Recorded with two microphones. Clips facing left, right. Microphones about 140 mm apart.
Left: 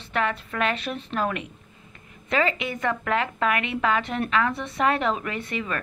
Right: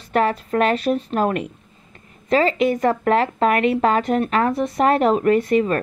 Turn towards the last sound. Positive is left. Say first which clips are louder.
# right 14 dB
turn(degrees=-40)  # may be behind; listen again after turning